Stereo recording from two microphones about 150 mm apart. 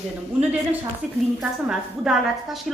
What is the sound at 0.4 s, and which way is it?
A woman's voice, 10° right (ahead or behind).